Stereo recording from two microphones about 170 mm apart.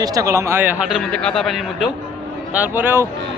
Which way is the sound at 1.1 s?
5° left (ahead or behind).